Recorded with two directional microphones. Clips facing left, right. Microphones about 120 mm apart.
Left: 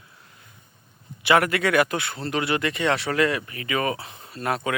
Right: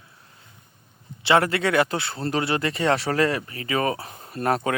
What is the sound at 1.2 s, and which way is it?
Speech, 30° right (ahead or behind).